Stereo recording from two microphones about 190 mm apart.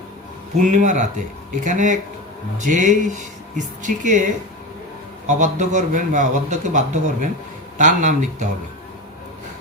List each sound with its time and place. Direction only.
0.6 s a man's voice: 40° right (ahead or behind)